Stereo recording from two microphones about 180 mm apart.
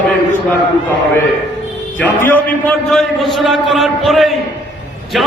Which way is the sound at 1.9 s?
10° left (ahead or behind).